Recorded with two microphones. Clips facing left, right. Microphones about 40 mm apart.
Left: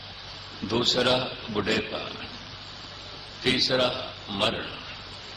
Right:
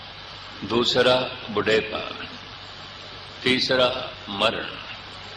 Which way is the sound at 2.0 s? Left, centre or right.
Right.